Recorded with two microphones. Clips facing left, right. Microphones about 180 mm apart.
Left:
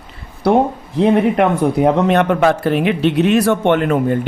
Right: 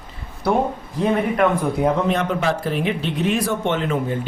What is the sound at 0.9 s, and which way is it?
Speech, 70° left (ahead or behind).